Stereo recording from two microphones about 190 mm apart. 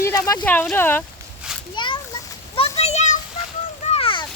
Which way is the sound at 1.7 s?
25° left (ahead or behind).